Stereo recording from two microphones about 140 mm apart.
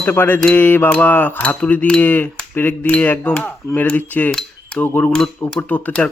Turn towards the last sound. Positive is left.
turn(degrees=10)  # may be behind; listen again after turning